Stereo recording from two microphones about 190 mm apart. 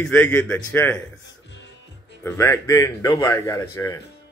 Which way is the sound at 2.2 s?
15° left (ahead or behind).